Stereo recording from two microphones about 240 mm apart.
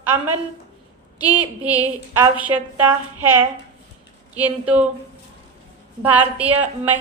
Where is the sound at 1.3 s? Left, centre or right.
Centre.